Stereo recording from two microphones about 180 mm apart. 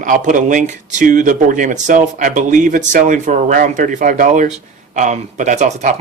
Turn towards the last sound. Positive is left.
turn(degrees=-40)  # may be behind; listen again after turning